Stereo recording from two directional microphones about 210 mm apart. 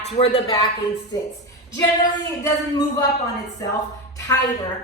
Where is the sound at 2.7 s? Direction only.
20° left (ahead or behind).